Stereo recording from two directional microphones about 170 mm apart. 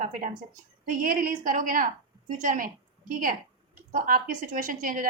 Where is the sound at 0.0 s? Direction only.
50° right (ahead or behind).